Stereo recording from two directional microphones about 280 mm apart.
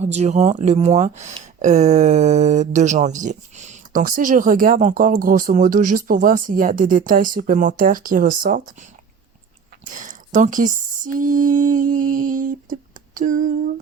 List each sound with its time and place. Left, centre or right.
0.0 s speech: right
9.9 s speech: right
12.6 s a sound: right